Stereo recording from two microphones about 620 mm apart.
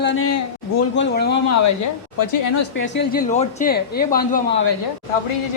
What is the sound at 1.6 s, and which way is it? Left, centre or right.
Speech, left.